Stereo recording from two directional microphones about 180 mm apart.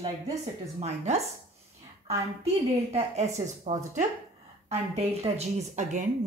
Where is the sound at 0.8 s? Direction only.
40° right (ahead or behind).